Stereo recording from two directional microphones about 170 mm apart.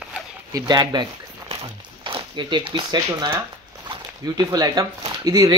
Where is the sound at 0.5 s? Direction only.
25° right (ahead or behind).